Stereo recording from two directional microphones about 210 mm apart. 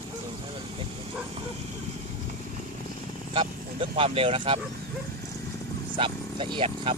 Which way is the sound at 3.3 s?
25° right (ahead or behind).